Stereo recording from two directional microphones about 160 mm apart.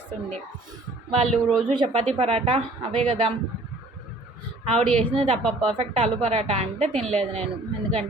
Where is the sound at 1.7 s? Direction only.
30° right (ahead or behind).